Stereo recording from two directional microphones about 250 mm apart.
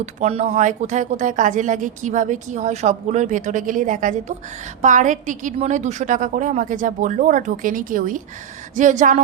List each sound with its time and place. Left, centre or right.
0.0 s a woman's voice: right